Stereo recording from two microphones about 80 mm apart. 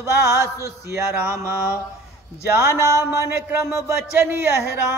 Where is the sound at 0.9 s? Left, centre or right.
Right.